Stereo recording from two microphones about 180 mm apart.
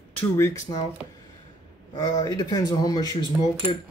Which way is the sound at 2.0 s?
20° left (ahead or behind).